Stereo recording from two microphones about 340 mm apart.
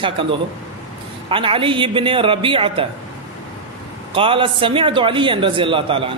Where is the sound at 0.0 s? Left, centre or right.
Centre.